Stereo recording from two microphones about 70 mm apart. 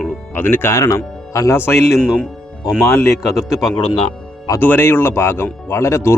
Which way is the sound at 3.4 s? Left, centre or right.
Left.